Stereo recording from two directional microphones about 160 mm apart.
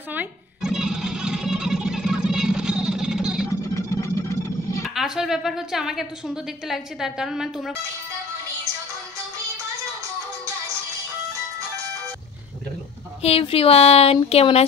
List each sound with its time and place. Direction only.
0.1 s guitar: 5° right (ahead or behind)
3.4 s music: 20° left (ahead or behind)
4.8 s a woman's voice: 5° right (ahead or behind)
13.2 s speech: 35° left (ahead or behind)